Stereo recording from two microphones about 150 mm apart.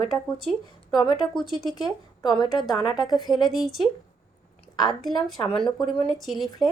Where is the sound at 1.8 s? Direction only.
30° left (ahead or behind).